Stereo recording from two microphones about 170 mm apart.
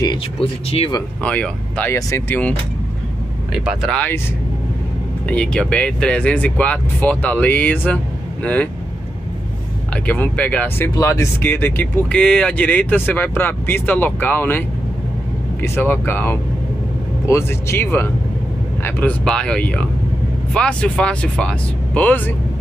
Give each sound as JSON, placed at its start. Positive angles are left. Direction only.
{"t": 0.0, "sound": "speech", "side_deg": 30}
{"t": 1.2, "sound": "speech", "side_deg": 10}
{"t": 3.5, "sound": "speech", "side_deg": -5}
{"t": 3.9, "sound": "speech", "side_deg": 10}
{"t": 5.3, "sound": "speech", "side_deg": 5}
{"t": 10.0, "sound": "speech", "side_deg": 10}
{"t": 15.6, "sound": "speech", "side_deg": 10}